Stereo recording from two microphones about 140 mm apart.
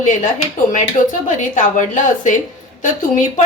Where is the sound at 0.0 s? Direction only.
65° left (ahead or behind).